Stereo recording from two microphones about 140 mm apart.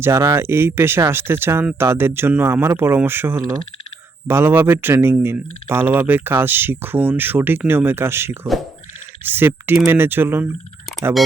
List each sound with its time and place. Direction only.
0.0 s speech: 20° right (ahead or behind)